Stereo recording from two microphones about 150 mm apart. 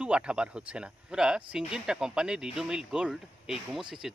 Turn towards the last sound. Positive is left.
turn(degrees=-5)  # may be behind; listen again after turning